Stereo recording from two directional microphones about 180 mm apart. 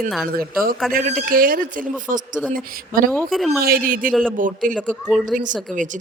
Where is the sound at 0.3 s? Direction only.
55° right (ahead or behind).